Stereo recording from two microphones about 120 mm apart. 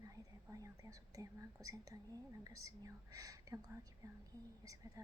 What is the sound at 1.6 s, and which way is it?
Speech, 30° right (ahead or behind).